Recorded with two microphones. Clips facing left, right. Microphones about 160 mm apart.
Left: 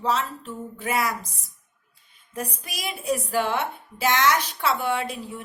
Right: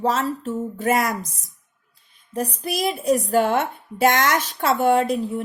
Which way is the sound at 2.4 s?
35° right (ahead or behind).